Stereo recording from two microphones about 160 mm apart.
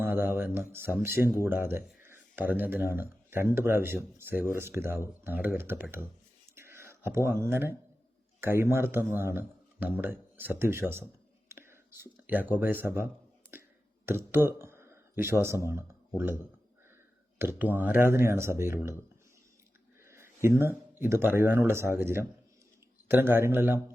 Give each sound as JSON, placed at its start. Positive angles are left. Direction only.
{"t": 0.0, "sound": "speech", "side_deg": -15}
{"t": 13.5, "sound": "a sound", "side_deg": -15}
{"t": 15.7, "sound": "speech", "side_deg": -15}
{"t": 17.3, "sound": "speech", "side_deg": -15}
{"t": 20.1, "sound": "a sound", "side_deg": -15}
{"t": 20.6, "sound": "speech", "side_deg": -15}